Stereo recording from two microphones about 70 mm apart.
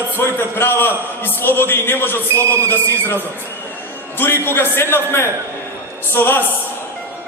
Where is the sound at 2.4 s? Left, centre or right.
Right.